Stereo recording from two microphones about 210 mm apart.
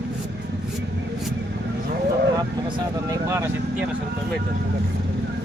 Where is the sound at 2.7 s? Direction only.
15° right (ahead or behind).